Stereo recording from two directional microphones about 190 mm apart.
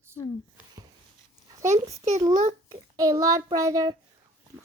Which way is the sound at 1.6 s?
35° right (ahead or behind).